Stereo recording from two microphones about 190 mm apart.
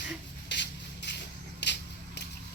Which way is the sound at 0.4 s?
65° left (ahead or behind).